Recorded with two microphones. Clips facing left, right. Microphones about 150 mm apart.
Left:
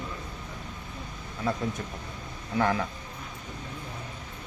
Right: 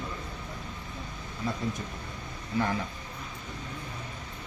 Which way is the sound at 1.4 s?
70° left (ahead or behind).